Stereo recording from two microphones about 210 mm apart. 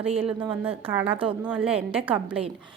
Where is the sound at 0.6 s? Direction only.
10° right (ahead or behind).